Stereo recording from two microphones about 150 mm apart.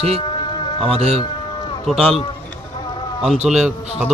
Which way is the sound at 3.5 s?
5° right (ahead or behind).